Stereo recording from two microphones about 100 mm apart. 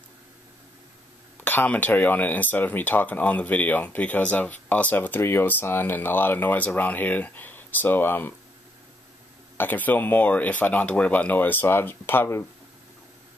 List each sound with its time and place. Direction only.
1.4 s speech: 20° left (ahead or behind)
9.6 s speech: 20° left (ahead or behind)